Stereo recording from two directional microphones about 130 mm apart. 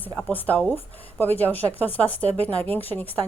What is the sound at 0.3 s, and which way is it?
A woman's voice, 10° left (ahead or behind).